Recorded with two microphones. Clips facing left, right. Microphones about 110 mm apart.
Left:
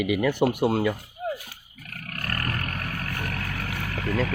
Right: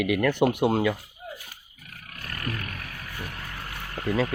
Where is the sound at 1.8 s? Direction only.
60° left (ahead or behind); by 4.1 s 90° left.